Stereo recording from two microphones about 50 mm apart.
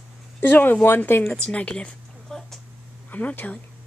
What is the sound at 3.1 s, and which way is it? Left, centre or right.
Speech, left.